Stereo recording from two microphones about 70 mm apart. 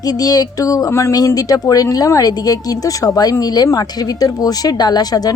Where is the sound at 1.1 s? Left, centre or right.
Left.